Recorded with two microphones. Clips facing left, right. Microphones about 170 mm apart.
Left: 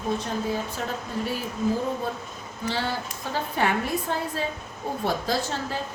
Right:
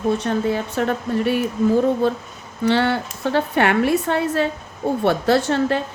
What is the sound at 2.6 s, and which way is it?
A woman's voice, 70° right (ahead or behind).